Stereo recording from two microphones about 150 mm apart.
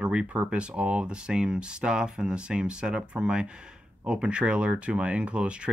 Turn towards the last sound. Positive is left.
turn(degrees=-5)  # may be behind; listen again after turning